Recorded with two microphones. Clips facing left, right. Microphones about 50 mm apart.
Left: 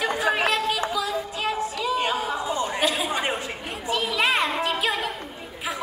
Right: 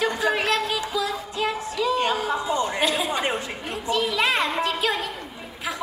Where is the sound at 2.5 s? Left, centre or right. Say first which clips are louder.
Right 1 dB; centre.